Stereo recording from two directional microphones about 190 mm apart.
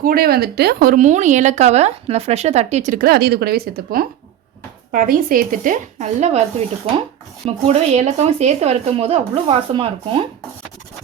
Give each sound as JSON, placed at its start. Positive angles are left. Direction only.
{"t": 0.0, "sound": "a woman's voice", "side_deg": -50}
{"t": 7.4, "sound": "a woman's voice", "side_deg": -35}